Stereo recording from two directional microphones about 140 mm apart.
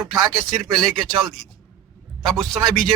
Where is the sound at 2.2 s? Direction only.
Centre (ahead or behind).